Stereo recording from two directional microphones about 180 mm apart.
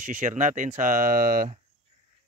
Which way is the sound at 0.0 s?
45° right (ahead or behind).